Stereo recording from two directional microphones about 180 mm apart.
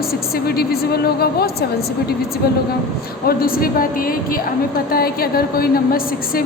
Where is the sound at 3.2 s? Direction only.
55° left (ahead or behind).